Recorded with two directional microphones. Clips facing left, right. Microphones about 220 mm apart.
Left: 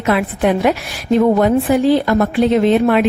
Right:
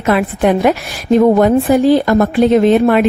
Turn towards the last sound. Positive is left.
turn(degrees=-45)  # may be behind; listen again after turning